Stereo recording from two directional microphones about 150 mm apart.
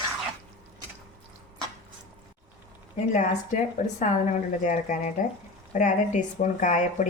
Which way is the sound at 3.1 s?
55° left (ahead or behind).